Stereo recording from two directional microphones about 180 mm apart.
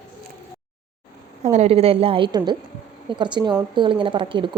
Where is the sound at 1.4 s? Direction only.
35° right (ahead or behind).